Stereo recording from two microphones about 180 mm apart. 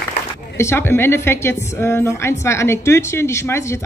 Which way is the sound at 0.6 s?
15° left (ahead or behind).